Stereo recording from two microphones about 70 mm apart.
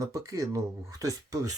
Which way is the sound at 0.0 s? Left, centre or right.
Right.